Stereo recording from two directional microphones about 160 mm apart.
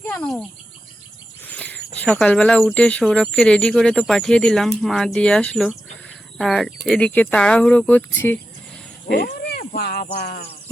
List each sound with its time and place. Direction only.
0.0 s speech: 5° left (ahead or behind)
1.5 s a sound: 10° left (ahead or behind)
2.0 s speech: 5° left (ahead or behind)
9.1 s speech: 70° left (ahead or behind)